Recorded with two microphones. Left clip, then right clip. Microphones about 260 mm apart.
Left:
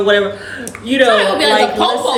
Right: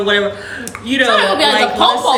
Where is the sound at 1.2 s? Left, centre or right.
Centre.